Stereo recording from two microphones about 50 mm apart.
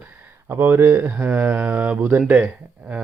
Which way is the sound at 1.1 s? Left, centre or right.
Right.